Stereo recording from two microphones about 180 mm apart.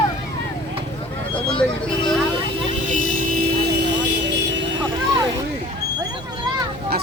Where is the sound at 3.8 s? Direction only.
75° right (ahead or behind).